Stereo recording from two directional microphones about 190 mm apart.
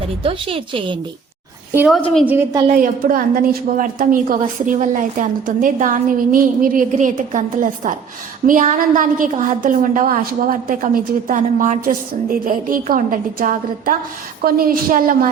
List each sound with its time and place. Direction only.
0.2 s a woman's voice: 30° right (ahead or behind)
2.2 s a woman's voice: 10° right (ahead or behind)
2.7 s a woman's voice: 50° right (ahead or behind)